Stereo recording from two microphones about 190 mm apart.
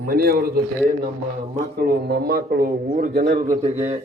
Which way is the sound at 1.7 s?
55° right (ahead or behind).